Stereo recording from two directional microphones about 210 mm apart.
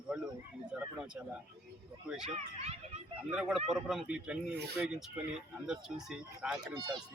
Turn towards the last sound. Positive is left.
turn(degrees=-20)  # may be behind; listen again after turning